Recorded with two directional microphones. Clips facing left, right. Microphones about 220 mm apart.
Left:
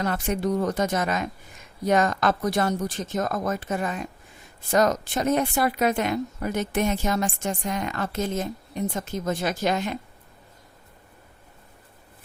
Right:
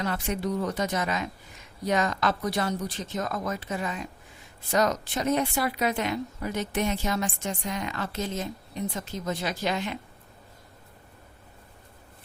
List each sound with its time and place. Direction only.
0.0 s speech: 45° left (ahead or behind)